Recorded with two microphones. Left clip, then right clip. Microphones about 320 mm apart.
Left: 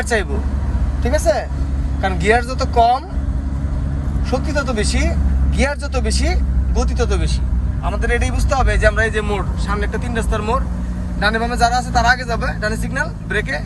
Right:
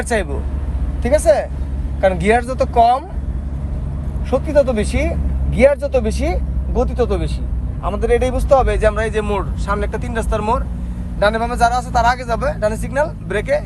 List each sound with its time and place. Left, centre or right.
1.0 s a man's voice: right
4.4 s a man's voice: right